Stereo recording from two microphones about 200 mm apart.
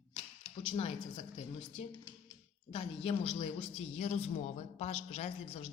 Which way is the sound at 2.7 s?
30° left (ahead or behind).